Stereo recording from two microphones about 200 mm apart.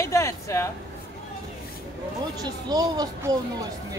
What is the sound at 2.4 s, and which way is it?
Speech, 20° right (ahead or behind).